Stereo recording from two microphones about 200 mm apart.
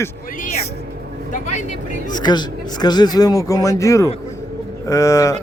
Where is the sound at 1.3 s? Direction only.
35° left (ahead or behind).